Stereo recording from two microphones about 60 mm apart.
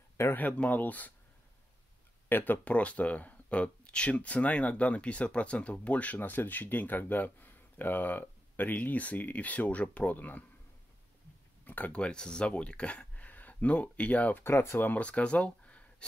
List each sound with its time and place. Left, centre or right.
0.2 s speech: left
2.2 s speech: left
11.6 s speech: left
14.4 s speech: left
15.0 s a sound: left